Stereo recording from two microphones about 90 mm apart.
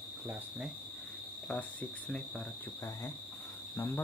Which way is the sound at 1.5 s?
20° left (ahead or behind).